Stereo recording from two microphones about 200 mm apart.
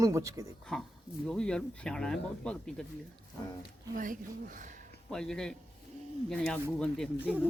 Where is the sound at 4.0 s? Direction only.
40° right (ahead or behind).